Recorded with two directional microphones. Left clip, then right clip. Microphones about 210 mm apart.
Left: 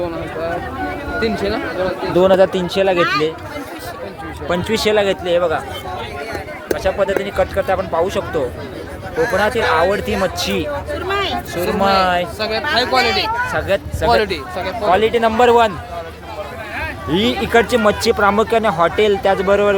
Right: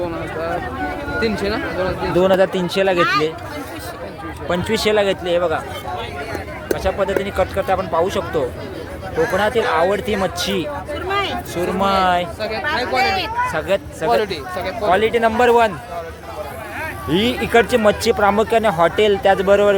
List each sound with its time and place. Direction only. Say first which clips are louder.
0.0 s a sound: left 1 dB; centre (ahead or behind)
1.2 s speech: left 2 dB; 15° right (ahead or behind)
2.1 s speech: left 3 dB; 5° left (ahead or behind)
3.0 s speech: even; 50° right (ahead or behind)
4.4 s speech: left 1 dB; centre (ahead or behind)
6.7 s speech: left 2 dB; centre (ahead or behind)
12.4 s speech: left 3 dB; 35° left (ahead or behind)
13.1 s speech: left 2 dB; centre (ahead or behind)
17.1 s speech: left 1 dB; 5° right (ahead or behind)